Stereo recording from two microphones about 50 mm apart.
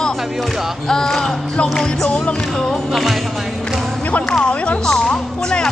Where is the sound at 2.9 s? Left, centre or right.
Centre.